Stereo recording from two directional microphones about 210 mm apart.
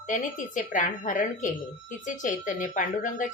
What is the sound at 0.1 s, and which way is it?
Speech, 35° left (ahead or behind).